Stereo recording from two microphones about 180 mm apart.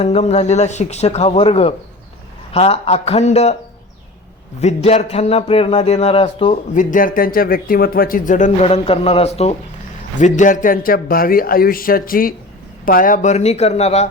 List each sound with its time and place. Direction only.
0.0 s speech: 35° left (ahead or behind)
4.6 s a man's voice: 35° left (ahead or behind)